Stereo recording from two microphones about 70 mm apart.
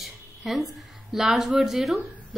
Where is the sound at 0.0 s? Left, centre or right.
Centre.